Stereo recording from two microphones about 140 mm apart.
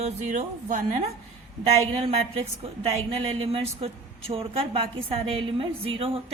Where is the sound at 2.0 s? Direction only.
45° right (ahead or behind).